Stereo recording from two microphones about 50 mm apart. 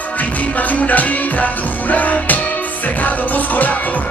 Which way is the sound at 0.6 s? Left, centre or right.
Left.